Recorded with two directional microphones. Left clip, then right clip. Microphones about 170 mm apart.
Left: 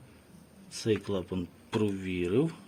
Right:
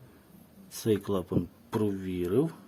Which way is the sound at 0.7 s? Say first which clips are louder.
Right 1 dB; 20° right (ahead or behind).